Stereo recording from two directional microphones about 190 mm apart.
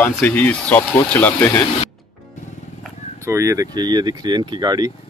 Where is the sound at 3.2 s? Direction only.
15° right (ahead or behind).